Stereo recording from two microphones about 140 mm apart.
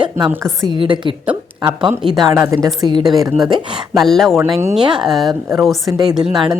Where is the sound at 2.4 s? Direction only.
20° right (ahead or behind).